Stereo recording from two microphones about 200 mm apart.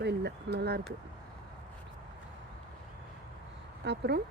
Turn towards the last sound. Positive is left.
turn(degrees=-55)  # may be behind; listen again after turning